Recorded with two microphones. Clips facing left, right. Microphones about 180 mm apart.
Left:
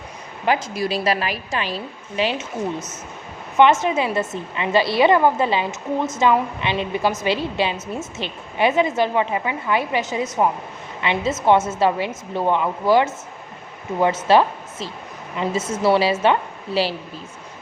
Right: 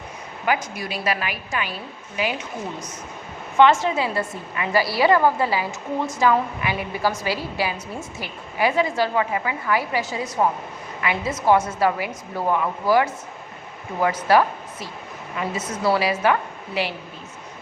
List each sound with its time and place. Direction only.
0.4 s a woman's voice: 30° left (ahead or behind)
3.6 s a woman's voice: 20° left (ahead or behind)